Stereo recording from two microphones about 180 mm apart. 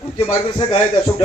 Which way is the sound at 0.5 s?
30° left (ahead or behind).